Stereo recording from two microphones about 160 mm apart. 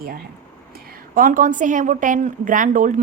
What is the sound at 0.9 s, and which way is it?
A woman's voice, 60° right (ahead or behind).